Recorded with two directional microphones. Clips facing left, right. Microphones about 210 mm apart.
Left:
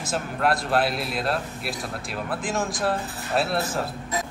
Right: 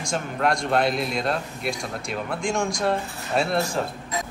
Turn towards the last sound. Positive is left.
turn(degrees=5)  # may be behind; listen again after turning